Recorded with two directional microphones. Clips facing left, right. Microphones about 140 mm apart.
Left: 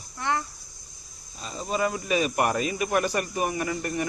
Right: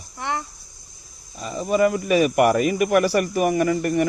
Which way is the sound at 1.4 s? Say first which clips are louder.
Right 8 dB; 60° right (ahead or behind).